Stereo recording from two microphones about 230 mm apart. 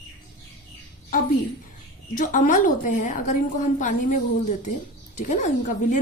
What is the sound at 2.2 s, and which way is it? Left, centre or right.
A woman's voice, left.